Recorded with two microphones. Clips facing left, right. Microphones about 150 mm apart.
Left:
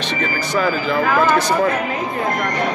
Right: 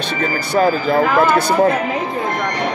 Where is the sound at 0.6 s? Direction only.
45° right (ahead or behind).